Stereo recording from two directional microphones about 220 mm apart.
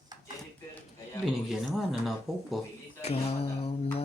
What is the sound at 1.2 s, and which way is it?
Speech, centre (ahead or behind).